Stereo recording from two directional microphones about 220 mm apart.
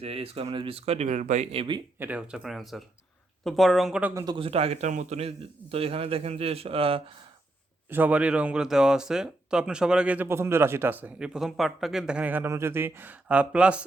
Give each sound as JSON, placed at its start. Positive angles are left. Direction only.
{"t": 0.0, "sound": "a woman's voice", "side_deg": -25}
{"t": 2.0, "sound": "a woman's voice", "side_deg": -5}
{"t": 7.9, "sound": "speech", "side_deg": -10}